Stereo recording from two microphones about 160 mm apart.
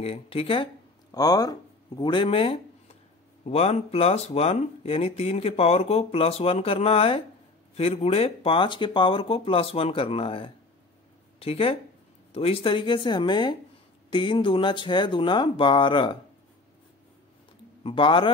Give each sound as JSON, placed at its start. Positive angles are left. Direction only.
{"t": 0.0, "sound": "speech", "side_deg": 35}
{"t": 1.1, "sound": "speech", "side_deg": 25}
{"t": 17.8, "sound": "speech", "side_deg": 30}